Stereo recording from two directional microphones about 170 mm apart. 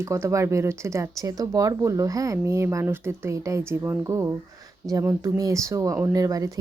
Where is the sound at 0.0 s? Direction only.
15° right (ahead or behind).